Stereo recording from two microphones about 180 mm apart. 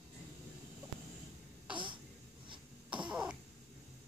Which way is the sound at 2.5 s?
25° right (ahead or behind).